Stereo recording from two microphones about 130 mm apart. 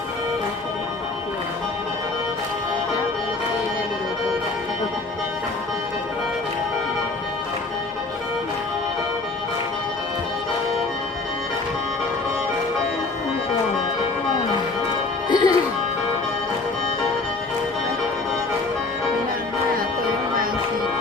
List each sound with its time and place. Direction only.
15.3 s music: 35° left (ahead or behind)